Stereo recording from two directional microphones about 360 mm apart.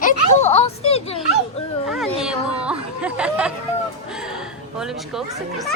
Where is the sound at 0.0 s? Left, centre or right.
Centre.